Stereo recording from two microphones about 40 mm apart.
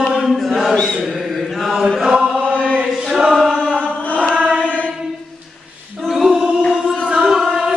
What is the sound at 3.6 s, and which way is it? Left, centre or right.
Chant, left.